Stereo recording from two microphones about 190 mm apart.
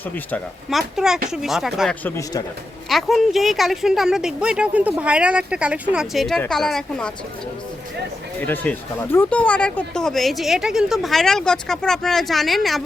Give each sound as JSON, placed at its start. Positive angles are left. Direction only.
{"t": 0.3, "sound": "speech", "side_deg": 5}
{"t": 2.0, "sound": "speech", "side_deg": 15}
{"t": 2.9, "sound": "speech", "side_deg": 0}
{"t": 8.4, "sound": "speech", "side_deg": 10}